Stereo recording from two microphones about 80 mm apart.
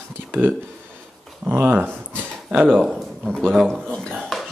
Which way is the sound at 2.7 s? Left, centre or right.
Centre.